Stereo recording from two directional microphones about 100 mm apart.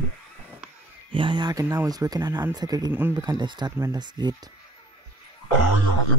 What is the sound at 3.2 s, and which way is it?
Speech, 45° right (ahead or behind).